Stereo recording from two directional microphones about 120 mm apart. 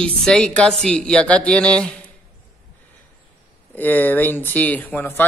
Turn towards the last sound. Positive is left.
turn(degrees=20)  # may be behind; listen again after turning